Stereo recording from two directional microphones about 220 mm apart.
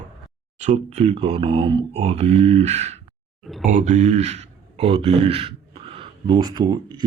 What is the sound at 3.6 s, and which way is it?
Speech, 35° right (ahead or behind).